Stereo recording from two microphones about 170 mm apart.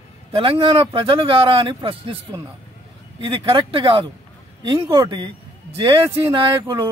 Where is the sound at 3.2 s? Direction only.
30° right (ahead or behind).